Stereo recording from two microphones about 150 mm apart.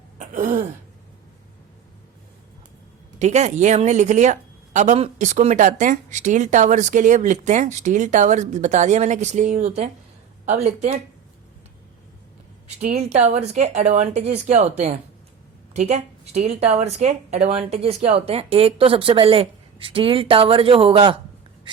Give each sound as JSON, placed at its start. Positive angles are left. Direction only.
{"t": 0.2, "sound": "throat clearing", "side_deg": -60}
{"t": 3.2, "sound": "speech", "side_deg": -50}
{"t": 12.8, "sound": "speech", "side_deg": -45}